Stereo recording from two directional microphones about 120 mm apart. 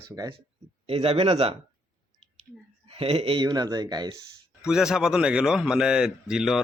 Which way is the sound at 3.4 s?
35° right (ahead or behind).